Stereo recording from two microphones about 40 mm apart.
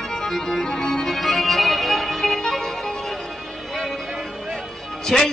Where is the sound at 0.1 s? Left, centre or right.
Centre.